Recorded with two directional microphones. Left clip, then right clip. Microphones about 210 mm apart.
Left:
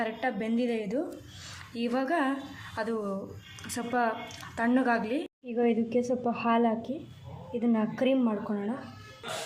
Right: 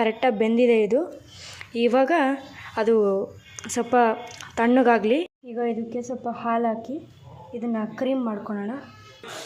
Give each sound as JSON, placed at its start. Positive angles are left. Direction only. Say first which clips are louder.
{"t": 0.0, "sound": "a woman's voice", "louder": "right 10 dB", "side_deg": -30}
{"t": 5.5, "sound": "a woman's voice", "louder": "left 3 dB", "side_deg": -5}